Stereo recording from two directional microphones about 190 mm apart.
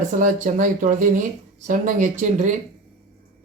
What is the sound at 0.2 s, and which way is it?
Speech, 40° right (ahead or behind).